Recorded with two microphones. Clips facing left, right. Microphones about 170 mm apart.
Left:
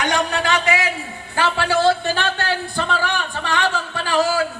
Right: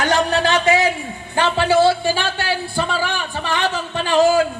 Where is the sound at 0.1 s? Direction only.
30° right (ahead or behind).